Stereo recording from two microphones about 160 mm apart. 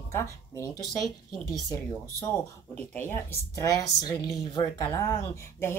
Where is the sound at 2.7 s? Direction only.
10° left (ahead or behind).